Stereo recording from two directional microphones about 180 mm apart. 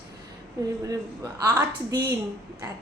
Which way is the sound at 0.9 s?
15° right (ahead or behind).